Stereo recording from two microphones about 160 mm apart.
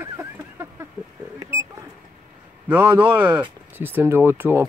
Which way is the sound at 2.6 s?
15° right (ahead or behind).